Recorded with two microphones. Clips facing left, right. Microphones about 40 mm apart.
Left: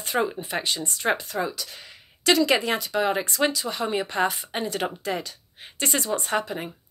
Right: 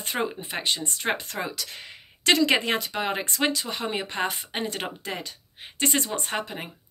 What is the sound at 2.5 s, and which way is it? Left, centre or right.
Speech, right.